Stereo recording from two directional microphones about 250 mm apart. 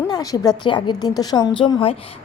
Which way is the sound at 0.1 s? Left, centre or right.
Centre.